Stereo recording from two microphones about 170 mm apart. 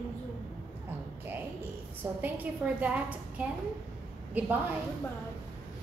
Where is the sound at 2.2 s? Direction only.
10° right (ahead or behind).